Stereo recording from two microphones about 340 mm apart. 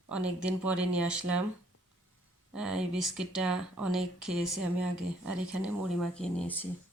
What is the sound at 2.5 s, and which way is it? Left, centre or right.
Speech, centre.